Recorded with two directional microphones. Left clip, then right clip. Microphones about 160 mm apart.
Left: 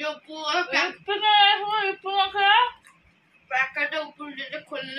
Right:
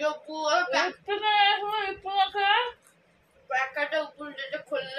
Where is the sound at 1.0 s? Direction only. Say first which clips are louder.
Left 6 dB; 10° right (ahead or behind).